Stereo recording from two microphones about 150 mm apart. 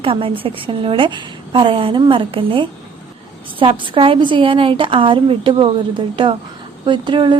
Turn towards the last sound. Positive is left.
turn(degrees=-30)  # may be behind; listen again after turning